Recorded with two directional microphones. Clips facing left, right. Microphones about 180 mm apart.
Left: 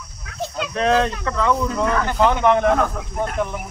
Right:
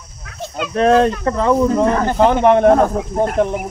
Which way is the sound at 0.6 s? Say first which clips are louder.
Right 6 dB; 40° right (ahead or behind).